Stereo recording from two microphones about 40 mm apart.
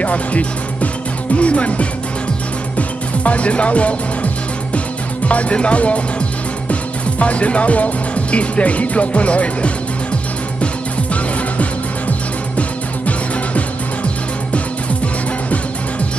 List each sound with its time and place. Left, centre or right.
0.0 s speech: left
3.3 s speech: left
5.3 s speech: left